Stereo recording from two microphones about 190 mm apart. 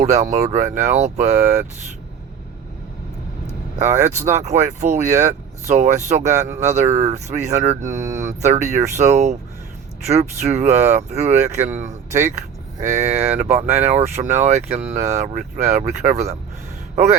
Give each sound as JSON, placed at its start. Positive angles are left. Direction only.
{"t": 0.0, "sound": "speech", "side_deg": -40}
{"t": 3.8, "sound": "speech", "side_deg": -40}